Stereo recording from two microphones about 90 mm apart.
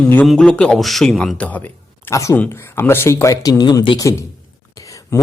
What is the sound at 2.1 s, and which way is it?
A man's voice, 35° left (ahead or behind).